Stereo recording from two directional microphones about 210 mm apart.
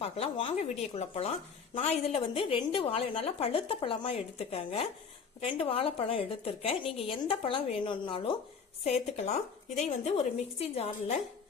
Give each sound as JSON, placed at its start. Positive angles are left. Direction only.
{"t": 0.0, "sound": "a woman's voice", "side_deg": 30}